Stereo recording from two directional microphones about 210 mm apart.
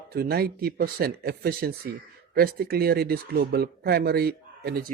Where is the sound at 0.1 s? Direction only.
50° right (ahead or behind).